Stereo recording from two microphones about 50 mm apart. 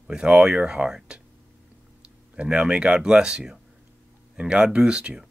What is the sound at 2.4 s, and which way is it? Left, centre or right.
Speech, centre.